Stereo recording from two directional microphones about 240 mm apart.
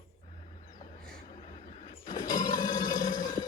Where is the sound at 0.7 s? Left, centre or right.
Centre.